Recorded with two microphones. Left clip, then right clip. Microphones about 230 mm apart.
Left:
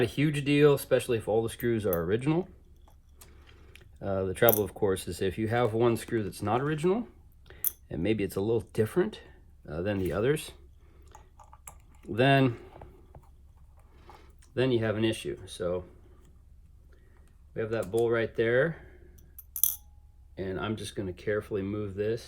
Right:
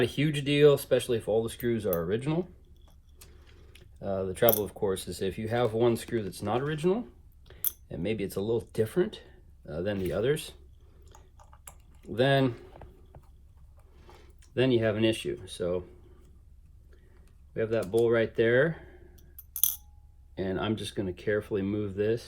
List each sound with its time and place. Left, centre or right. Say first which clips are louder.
0.2 s speech: right 1 dB; left
3.4 s keys jangling: left 2 dB; left
4.5 s speech: left 2 dB; left
11.3 s a sound: left 2 dB; centre
12.0 s speech: left 1 dB; left
14.0 s speech: left 2 dB; centre
17.5 s speech: right 3 dB; centre
18.0 s a sound: right 2 dB; centre
20.3 s speech: right 3 dB; centre